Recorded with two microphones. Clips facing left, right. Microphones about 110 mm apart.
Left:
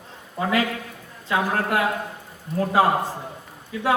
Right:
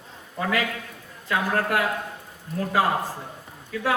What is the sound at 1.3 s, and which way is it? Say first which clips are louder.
A man's voice: left 1 dB; 20° left (ahead or behind).